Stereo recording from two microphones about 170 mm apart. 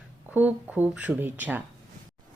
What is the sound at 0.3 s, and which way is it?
Speech, 10° right (ahead or behind).